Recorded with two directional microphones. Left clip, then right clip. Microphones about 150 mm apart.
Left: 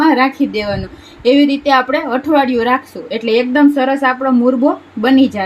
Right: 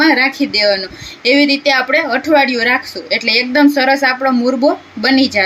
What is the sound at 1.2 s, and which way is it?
A woman's voice, 60° left (ahead or behind).